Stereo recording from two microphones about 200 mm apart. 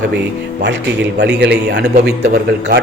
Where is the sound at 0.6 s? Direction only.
60° right (ahead or behind).